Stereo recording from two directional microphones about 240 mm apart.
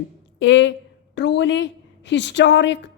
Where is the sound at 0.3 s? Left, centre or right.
Left.